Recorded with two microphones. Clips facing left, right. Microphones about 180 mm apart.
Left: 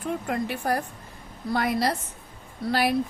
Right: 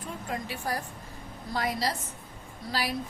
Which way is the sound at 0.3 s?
60° left (ahead or behind).